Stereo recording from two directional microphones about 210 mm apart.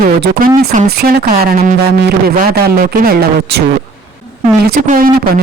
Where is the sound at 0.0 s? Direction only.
40° right (ahead or behind).